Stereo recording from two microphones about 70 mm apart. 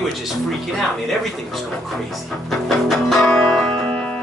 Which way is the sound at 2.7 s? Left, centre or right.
Centre.